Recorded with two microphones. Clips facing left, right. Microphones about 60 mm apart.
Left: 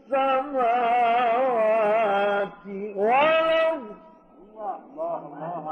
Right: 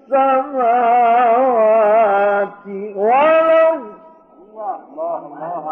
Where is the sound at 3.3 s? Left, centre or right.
Right.